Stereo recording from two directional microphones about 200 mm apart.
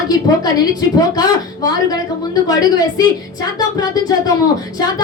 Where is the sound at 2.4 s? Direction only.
20° left (ahead or behind).